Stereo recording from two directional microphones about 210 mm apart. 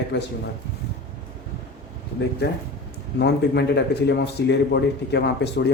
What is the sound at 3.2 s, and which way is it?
Speech, 50° left (ahead or behind).